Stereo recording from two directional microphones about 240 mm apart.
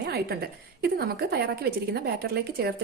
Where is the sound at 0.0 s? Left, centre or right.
Right.